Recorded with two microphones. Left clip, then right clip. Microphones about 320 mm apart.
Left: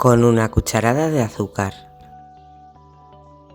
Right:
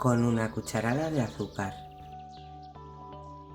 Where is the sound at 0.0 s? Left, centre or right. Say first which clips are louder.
Left 14 dB; left.